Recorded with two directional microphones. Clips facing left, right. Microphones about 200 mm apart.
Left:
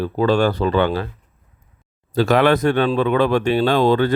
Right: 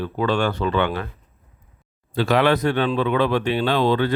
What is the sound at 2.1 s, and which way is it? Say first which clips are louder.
Speech: left 3 dB; 45° left (ahead or behind).